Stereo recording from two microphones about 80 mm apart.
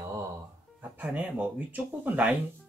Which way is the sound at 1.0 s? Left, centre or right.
Centre.